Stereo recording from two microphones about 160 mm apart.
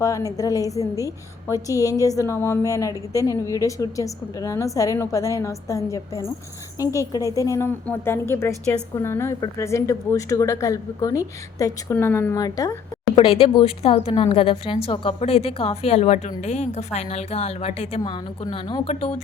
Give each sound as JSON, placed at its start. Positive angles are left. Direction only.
{"t": 0.0, "sound": "a woman's voice", "side_deg": 20}
{"t": 13.4, "sound": "a woman's voice", "side_deg": 35}
{"t": 18.0, "sound": "a woman's voice", "side_deg": 25}